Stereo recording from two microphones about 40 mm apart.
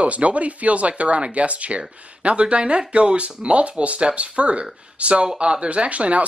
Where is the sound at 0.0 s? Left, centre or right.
Right.